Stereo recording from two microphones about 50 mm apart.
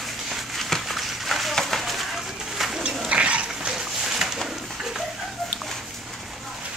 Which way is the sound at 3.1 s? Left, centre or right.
Right.